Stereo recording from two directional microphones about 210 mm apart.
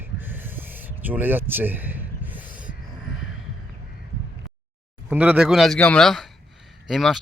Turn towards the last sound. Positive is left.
turn(degrees=0)  # may be behind; listen again after turning